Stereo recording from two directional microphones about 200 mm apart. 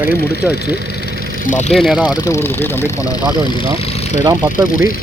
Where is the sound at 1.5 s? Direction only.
35° left (ahead or behind).